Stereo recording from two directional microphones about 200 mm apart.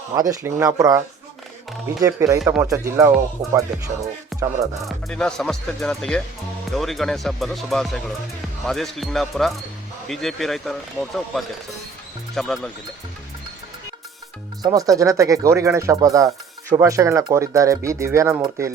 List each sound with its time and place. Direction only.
0.1 s speech: 15° right (ahead or behind)
3.7 s speech: centre (ahead or behind)
4.3 s music: centre (ahead or behind)
4.9 s speech: 5° left (ahead or behind)
14.6 s speech: 20° right (ahead or behind)